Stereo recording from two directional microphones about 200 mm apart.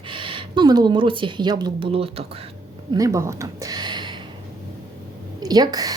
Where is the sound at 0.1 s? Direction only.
25° right (ahead or behind).